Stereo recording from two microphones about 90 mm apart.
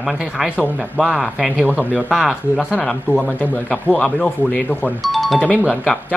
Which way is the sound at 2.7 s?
15° left (ahead or behind).